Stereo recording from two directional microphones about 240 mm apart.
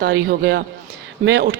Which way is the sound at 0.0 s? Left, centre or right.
Right.